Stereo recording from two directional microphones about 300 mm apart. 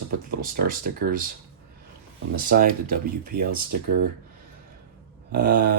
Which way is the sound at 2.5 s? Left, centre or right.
Right.